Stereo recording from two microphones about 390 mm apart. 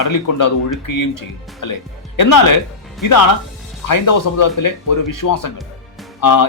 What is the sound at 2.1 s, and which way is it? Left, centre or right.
Speech, left.